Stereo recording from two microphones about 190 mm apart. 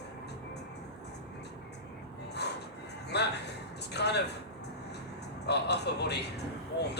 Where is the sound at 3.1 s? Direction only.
60° left (ahead or behind).